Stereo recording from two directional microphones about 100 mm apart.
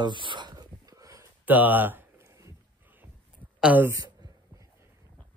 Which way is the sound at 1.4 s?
15° right (ahead or behind).